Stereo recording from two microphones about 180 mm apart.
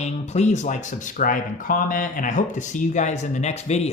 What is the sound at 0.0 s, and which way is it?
A man's voice, 40° left (ahead or behind).